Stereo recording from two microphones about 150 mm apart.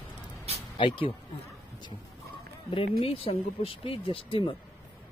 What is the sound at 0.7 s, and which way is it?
Speech, 35° left (ahead or behind).